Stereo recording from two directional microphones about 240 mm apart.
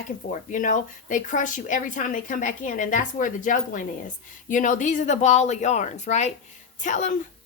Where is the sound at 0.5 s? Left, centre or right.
Left.